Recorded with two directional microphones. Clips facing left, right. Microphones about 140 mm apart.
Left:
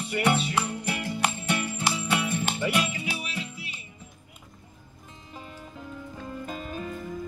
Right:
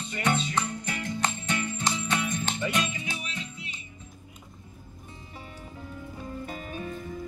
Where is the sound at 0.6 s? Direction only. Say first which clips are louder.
Left 2 dB; 30° left (ahead or behind).